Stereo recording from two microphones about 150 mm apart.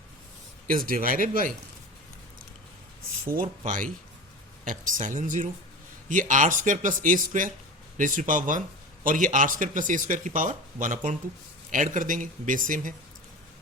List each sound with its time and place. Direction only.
0.7 s speech: 70° right (ahead or behind)
4.6 s a man's voice: 60° right (ahead or behind)